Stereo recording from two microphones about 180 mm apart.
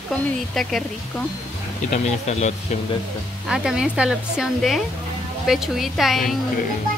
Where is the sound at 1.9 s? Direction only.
40° left (ahead or behind).